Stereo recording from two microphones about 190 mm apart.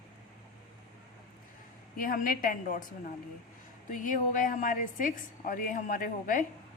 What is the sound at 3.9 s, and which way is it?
A woman's voice, 45° left (ahead or behind).